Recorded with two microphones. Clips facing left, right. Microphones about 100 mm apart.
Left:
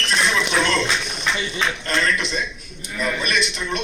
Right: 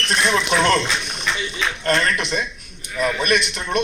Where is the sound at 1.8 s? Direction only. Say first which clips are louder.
Right 6 dB; 50° right (ahead or behind).